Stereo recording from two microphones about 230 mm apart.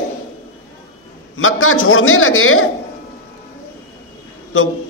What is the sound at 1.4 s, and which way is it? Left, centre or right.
A man's voice, left.